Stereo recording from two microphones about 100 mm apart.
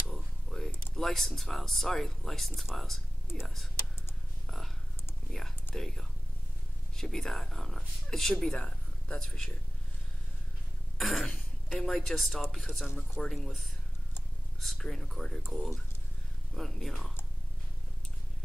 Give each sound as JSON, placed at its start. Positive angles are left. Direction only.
{"t": 0.1, "sound": "mechanisms", "side_deg": 5}
{"t": 0.9, "sound": "speech", "side_deg": 5}
{"t": 3.3, "sound": "speech", "side_deg": 25}
{"t": 4.5, "sound": "a sound", "side_deg": 0}
{"t": 5.8, "sound": "speech", "side_deg": 5}
{"t": 11.0, "sound": "speech", "side_deg": 0}